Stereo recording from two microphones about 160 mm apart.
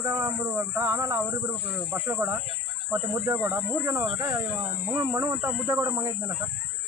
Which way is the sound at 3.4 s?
15° right (ahead or behind).